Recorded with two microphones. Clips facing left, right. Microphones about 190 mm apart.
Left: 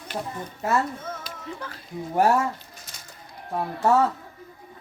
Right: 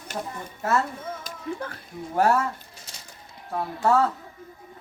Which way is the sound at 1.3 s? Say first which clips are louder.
Right 4 dB; 55° right (ahead or behind).